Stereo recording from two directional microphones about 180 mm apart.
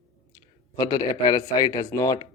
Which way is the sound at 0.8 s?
20° left (ahead or behind).